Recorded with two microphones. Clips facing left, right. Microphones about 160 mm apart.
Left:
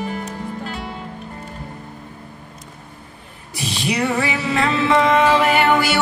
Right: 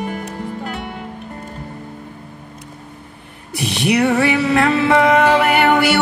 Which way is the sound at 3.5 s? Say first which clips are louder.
Right 6 dB; 65° right (ahead or behind).